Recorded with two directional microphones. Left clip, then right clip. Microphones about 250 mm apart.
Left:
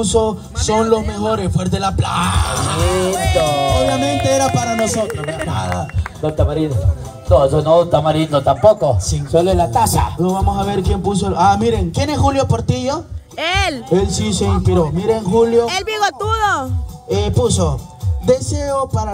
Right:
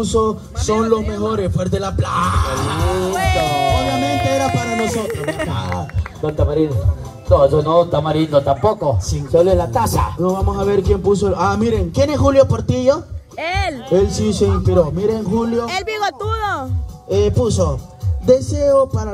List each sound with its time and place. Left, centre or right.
0.0 s a man's voice: left
2.4 s a sound: left
3.2 s music: right
5.1 s speech: right
5.5 s speech: left
13.4 s speech: centre
13.9 s a man's voice: left
15.6 s speech: centre
17.1 s a man's voice: left